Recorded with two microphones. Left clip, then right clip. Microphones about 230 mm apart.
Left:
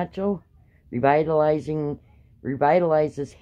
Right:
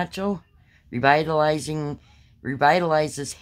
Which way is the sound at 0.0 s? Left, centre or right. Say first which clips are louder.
Left 1 dB; right.